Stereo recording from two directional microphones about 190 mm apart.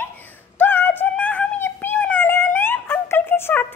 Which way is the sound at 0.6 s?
10° left (ahead or behind).